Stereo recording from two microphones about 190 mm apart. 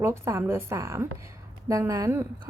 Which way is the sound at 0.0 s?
15° right (ahead or behind).